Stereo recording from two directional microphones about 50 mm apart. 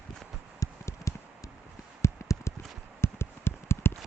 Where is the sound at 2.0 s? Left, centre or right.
Left.